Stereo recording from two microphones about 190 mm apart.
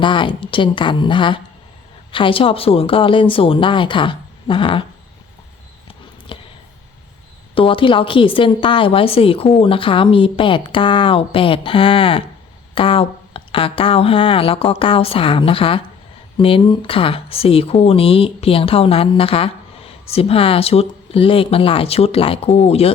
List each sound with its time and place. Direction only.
0.0 s speech: 25° left (ahead or behind)
6.3 s a sound: 25° left (ahead or behind)
7.5 s speech: 30° left (ahead or behind)